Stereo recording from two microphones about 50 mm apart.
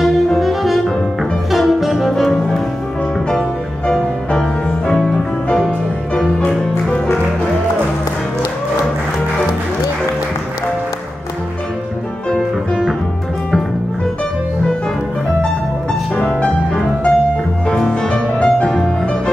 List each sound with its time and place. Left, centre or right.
0.4 s saxophone: centre
3.3 s music: centre
12.4 s music: centre
16.2 s music: left